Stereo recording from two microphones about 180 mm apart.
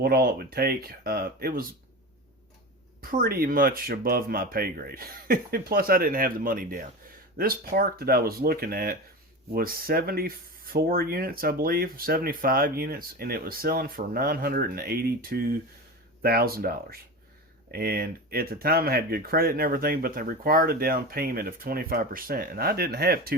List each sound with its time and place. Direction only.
0.0 s speech: 60° right (ahead or behind)
3.0 s speech: 55° right (ahead or behind)